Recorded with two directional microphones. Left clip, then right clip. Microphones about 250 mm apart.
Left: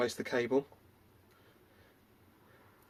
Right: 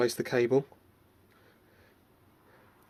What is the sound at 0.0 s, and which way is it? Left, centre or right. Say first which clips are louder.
Speech: right 5 dB; right.